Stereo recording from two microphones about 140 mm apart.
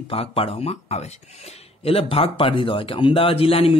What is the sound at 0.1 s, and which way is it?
A man's voice, 40° left (ahead or behind).